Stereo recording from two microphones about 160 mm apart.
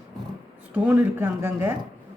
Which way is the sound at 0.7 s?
10° right (ahead or behind).